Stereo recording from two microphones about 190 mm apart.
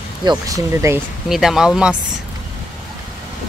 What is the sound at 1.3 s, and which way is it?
Speech, centre (ahead or behind).